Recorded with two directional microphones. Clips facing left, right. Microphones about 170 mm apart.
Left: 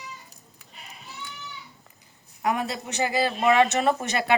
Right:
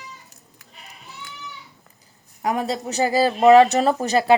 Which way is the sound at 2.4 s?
35° right (ahead or behind).